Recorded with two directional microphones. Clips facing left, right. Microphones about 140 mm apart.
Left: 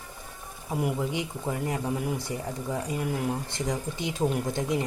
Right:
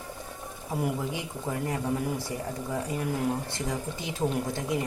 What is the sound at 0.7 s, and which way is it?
Speech, 15° left (ahead or behind).